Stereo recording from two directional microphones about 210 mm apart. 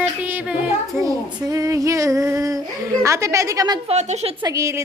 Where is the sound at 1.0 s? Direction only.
15° right (ahead or behind).